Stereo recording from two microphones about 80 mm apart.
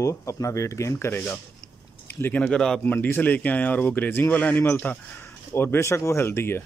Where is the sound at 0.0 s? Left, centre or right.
Left.